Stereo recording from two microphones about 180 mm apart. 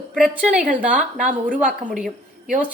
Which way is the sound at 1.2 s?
45° right (ahead or behind).